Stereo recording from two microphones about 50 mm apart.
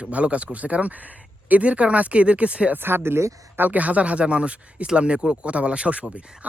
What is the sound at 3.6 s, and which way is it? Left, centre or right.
Speech, right.